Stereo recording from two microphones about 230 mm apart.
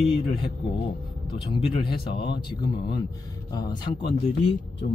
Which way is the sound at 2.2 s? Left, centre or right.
Centre.